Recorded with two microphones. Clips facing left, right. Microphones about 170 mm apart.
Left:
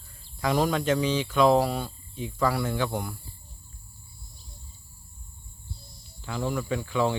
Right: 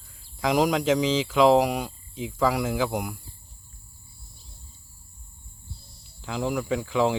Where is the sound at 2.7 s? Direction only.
5° right (ahead or behind).